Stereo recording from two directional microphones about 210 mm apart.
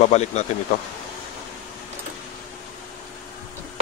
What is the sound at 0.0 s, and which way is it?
Speech, 35° left (ahead or behind).